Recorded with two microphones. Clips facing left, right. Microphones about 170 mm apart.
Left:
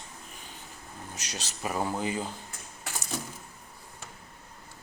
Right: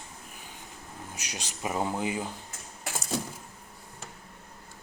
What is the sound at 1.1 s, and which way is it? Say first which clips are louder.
Speech: left 1 dB; 10° right (ahead or behind).